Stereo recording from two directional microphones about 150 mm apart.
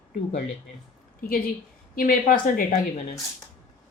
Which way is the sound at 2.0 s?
65° left (ahead or behind).